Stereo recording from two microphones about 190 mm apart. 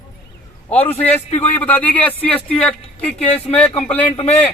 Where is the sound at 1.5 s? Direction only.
10° left (ahead or behind).